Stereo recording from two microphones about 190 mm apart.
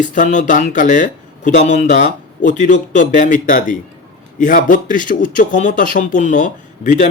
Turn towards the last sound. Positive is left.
turn(degrees=40)  # may be behind; listen again after turning